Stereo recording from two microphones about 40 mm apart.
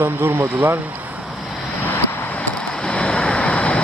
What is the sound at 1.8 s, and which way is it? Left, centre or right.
Vehicle, left.